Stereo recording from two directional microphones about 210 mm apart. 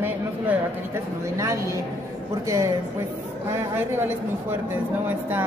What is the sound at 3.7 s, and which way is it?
Speech, 10° right (ahead or behind).